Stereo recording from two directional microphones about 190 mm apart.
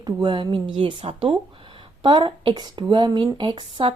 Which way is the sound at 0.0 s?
25° right (ahead or behind).